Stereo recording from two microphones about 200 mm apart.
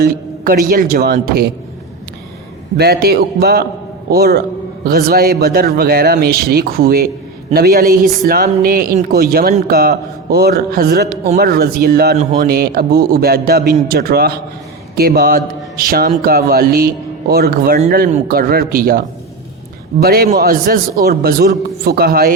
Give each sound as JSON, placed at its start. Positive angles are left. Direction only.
{"t": 0.0, "sound": "a man's voice", "side_deg": -45}
{"t": 2.7, "sound": "a man's voice", "side_deg": -50}
{"t": 12.1, "sound": "speech", "side_deg": -35}
{"t": 12.5, "sound": "a man's voice", "side_deg": -50}